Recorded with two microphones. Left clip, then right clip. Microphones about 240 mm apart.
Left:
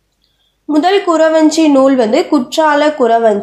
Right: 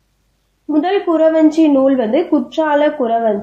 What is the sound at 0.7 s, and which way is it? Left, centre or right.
A woman's voice, left.